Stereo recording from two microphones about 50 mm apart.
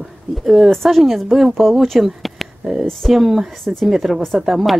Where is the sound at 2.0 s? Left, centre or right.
Centre.